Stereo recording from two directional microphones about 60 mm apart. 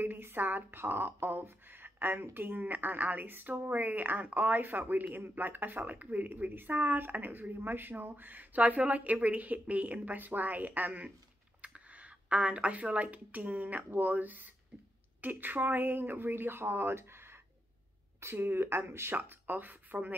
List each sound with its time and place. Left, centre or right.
0.0 s a woman's voice: right